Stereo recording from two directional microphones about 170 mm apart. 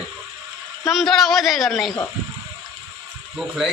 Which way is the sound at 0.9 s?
Centre (ahead or behind).